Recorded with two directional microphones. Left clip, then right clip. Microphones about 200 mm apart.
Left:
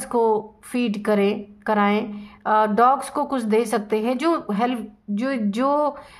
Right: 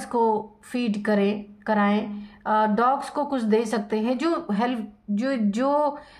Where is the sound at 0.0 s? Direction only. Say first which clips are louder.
Left 3 dB; 25° left (ahead or behind).